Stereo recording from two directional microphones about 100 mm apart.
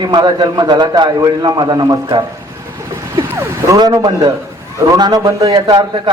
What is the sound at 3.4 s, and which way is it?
Speech, 30° right (ahead or behind).